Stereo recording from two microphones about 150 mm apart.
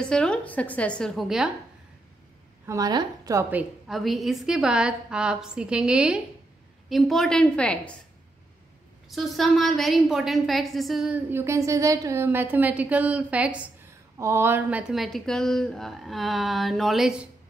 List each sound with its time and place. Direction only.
0.0 s speech: 5° left (ahead or behind)
2.6 s a woman's voice: 20° right (ahead or behind)
3.9 s a woman's voice: centre (ahead or behind)
9.1 s a woman's voice: centre (ahead or behind)